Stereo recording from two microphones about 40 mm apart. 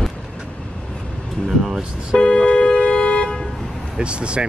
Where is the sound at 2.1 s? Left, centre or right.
Left.